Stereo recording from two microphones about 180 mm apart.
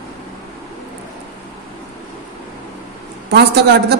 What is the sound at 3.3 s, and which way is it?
Speech, 65° right (ahead or behind).